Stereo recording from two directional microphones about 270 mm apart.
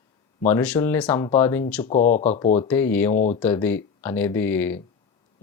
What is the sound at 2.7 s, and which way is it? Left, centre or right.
Speech, centre.